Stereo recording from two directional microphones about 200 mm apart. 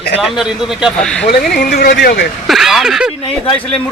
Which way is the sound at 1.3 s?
50° left (ahead or behind).